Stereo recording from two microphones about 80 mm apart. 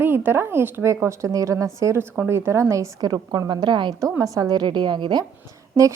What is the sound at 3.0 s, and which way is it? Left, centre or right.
Speech, right.